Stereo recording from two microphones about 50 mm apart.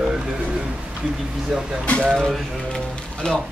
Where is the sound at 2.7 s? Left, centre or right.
Centre.